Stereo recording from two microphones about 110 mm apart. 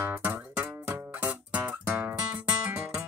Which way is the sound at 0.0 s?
20° right (ahead or behind).